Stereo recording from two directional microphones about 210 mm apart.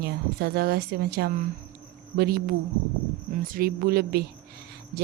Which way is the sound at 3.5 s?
45° right (ahead or behind).